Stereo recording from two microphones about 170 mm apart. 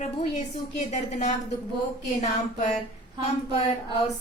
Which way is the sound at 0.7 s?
45° left (ahead or behind).